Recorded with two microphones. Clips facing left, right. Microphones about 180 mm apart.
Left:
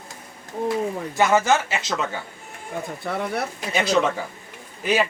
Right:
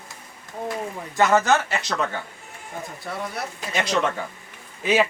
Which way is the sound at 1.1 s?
Centre (ahead or behind).